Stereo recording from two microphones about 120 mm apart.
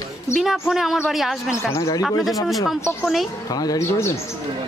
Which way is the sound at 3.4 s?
30° left (ahead or behind).